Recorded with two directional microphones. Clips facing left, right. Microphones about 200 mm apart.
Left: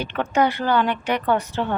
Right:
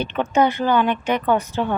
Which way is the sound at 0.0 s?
20° right (ahead or behind).